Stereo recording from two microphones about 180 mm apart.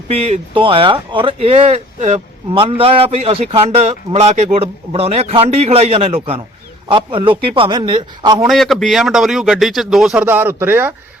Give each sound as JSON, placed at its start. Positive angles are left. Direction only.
{"t": 0.1, "sound": "a man's voice", "side_deg": -35}
{"t": 8.4, "sound": "speech", "side_deg": 0}